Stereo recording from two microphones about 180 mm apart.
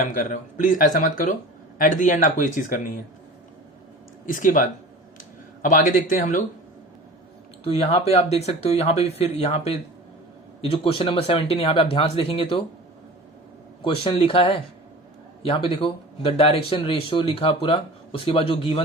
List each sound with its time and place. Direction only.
0.1 s speech: 45° left (ahead or behind)
4.3 s speech: 50° left (ahead or behind)
7.6 s speech: 35° left (ahead or behind)
13.8 s speech: 30° left (ahead or behind)